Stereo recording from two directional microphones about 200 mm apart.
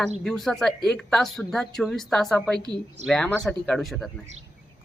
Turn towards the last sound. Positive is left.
turn(degrees=0)  # may be behind; listen again after turning